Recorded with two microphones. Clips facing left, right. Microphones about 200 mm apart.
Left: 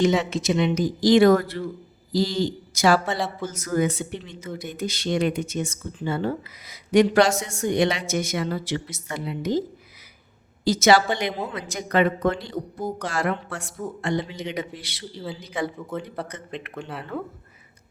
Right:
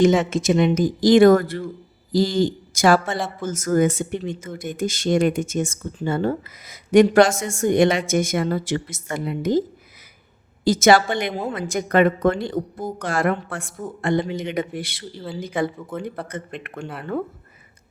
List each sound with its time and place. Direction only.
0.0 s speech: 50° right (ahead or behind)
15.8 s speech: centre (ahead or behind)
16.6 s speech: 45° right (ahead or behind)